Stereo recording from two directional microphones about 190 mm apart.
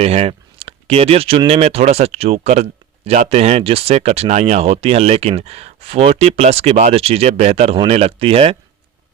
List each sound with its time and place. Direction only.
0.0 s speech: 30° right (ahead or behind)